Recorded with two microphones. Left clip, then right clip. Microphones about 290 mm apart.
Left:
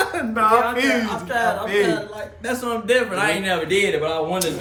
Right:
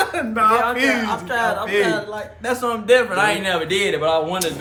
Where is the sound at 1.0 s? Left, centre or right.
Centre.